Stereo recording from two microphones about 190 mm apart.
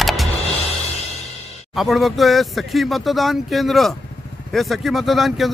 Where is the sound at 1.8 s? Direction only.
Centre (ahead or behind).